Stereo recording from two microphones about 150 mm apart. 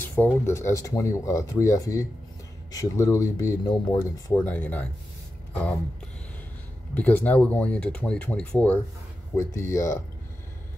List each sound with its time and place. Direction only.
0.0 s speech: 15° left (ahead or behind)
6.9 s speech: 10° left (ahead or behind)